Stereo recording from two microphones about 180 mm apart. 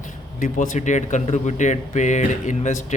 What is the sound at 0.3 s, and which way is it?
Speech, 45° left (ahead or behind).